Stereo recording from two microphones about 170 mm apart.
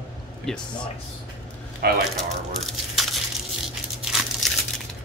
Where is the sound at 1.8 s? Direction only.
65° right (ahead or behind).